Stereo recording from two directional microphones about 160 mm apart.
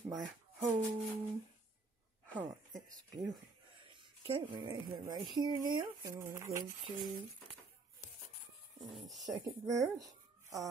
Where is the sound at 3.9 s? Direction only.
30° right (ahead or behind).